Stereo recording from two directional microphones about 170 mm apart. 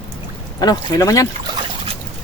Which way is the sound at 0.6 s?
20° left (ahead or behind).